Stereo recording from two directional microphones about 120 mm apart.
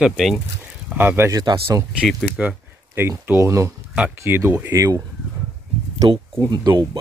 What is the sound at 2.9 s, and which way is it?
Speech, 20° right (ahead or behind).